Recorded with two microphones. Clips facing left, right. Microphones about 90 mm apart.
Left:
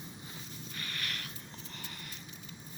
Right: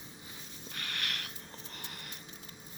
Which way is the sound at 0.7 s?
70° right (ahead or behind).